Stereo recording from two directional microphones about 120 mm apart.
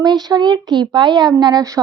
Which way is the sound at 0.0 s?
35° right (ahead or behind).